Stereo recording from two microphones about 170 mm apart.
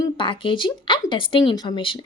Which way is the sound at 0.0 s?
30° left (ahead or behind).